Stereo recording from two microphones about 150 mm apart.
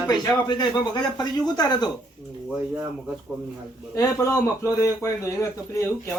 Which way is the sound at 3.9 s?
20° left (ahead or behind).